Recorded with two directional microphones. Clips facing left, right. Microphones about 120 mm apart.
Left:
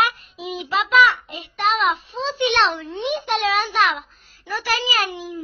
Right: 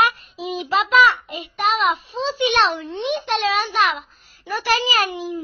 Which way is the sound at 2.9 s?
5° left (ahead or behind).